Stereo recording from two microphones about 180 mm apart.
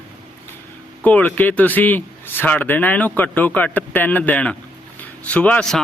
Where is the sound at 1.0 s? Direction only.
10° left (ahead or behind).